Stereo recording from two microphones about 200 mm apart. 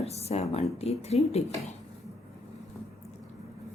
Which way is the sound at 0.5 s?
30° left (ahead or behind).